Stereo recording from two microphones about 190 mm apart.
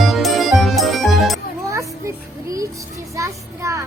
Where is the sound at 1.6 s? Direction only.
15° right (ahead or behind).